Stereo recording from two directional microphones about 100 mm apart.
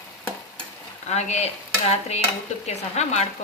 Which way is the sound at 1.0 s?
90° left.